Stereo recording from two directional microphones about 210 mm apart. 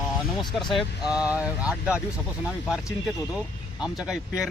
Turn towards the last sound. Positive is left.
turn(degrees=-5)  # may be behind; listen again after turning